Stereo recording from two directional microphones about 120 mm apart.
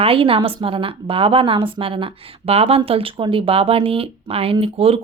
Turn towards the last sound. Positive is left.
turn(degrees=-55)  # may be behind; listen again after turning